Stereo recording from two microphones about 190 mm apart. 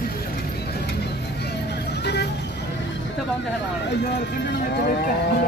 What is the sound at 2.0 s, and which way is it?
Vehicle, 65° left (ahead or behind).